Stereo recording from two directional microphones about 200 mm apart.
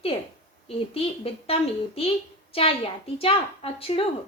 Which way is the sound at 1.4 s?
30° left (ahead or behind).